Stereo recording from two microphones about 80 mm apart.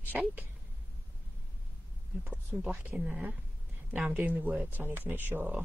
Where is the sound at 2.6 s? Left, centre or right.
Centre.